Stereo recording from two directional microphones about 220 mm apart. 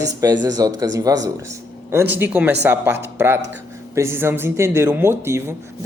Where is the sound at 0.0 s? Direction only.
15° right (ahead or behind).